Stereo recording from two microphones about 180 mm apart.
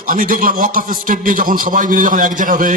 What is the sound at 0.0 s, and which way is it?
A man's voice, 50° right (ahead or behind).